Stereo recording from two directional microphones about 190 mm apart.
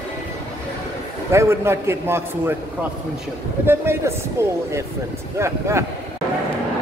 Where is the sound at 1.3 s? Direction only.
15° right (ahead or behind).